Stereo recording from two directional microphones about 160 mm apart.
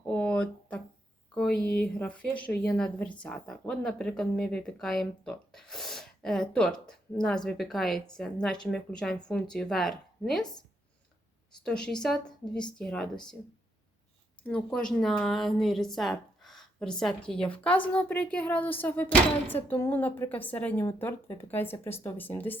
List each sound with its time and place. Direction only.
0.0 s a sound: 10° left (ahead or behind)
1.6 s speech: 10° left (ahead or behind)
11.6 s speech: 5° left (ahead or behind)
14.4 s speech: 5° left (ahead or behind)